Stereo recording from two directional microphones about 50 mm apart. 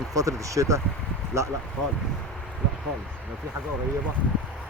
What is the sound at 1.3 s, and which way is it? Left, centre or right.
Speech, right.